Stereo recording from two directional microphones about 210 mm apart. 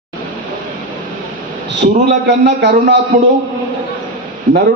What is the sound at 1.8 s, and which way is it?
A man's voice, 55° right (ahead or behind).